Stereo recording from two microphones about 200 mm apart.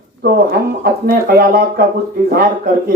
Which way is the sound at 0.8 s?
50° right (ahead or behind).